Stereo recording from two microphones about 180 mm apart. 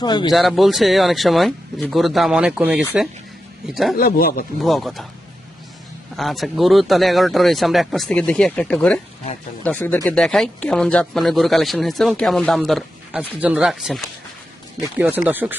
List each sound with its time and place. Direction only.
0.0 s speech: 25° left (ahead or behind)
0.3 s speech: centre (ahead or behind)
3.9 s speech: 55° left (ahead or behind)
4.6 s speech: centre (ahead or behind)
6.1 s speech: centre (ahead or behind)